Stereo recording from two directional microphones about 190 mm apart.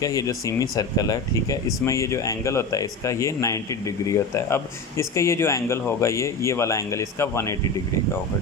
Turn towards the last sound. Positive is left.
turn(degrees=15)  # may be behind; listen again after turning